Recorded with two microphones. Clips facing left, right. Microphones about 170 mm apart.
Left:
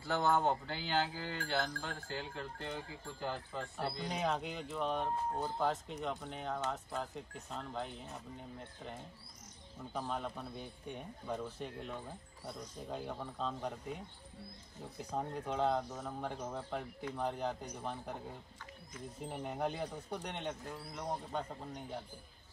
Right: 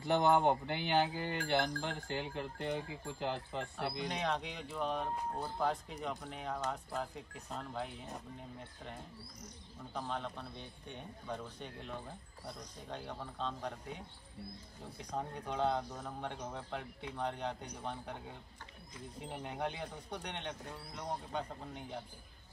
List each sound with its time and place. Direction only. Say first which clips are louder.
0.0 s speech: right 3 dB; 20° right (ahead or behind)
4.1 s speech: left 1 dB; 5° left (ahead or behind)
9.9 s speech: left 1 dB; 5° left (ahead or behind)
15.0 s speech: left 2 dB; 5° left (ahead or behind)